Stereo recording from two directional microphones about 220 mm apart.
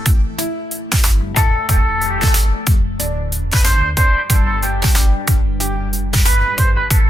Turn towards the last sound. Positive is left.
turn(degrees=0)  # may be behind; listen again after turning